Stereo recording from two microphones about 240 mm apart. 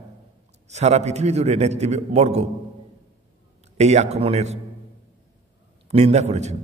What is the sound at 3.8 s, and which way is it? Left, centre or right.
Speech, right.